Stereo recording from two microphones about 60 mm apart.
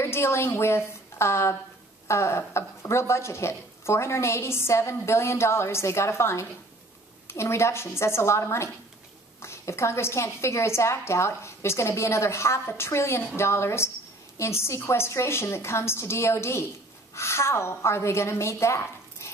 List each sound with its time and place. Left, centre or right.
0.0 s a woman's voice: left